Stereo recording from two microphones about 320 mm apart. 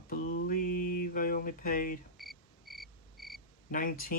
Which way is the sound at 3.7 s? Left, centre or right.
Left.